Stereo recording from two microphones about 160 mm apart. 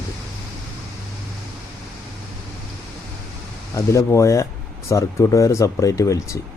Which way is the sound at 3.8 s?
20° left (ahead or behind).